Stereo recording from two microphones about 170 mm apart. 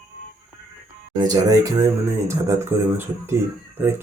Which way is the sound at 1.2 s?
20° right (ahead or behind).